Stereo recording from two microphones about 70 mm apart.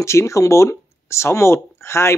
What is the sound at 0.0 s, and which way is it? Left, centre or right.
Speech, left.